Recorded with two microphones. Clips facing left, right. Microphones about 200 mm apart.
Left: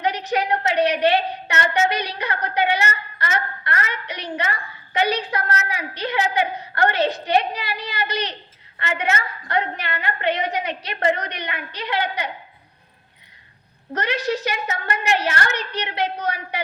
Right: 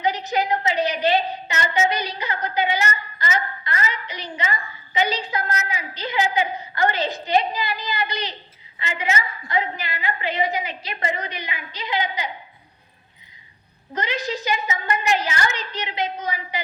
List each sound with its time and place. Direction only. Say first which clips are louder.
0.0 s a woman's voice: even; 65° left (ahead or behind)
13.9 s a woman's voice: left 3 dB; 70° left (ahead or behind)